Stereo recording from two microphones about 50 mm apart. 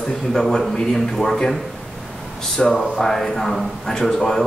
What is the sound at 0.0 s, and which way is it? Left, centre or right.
A man's voice, centre.